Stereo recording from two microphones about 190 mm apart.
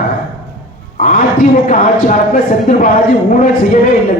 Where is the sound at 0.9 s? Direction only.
45° left (ahead or behind).